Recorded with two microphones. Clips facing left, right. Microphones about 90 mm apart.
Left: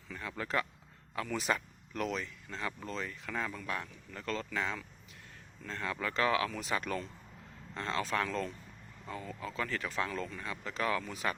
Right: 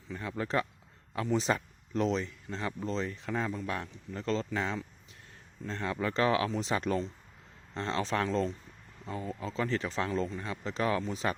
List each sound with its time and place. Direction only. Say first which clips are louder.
0.1 s speech: right 4 dB; 25° right (ahead or behind)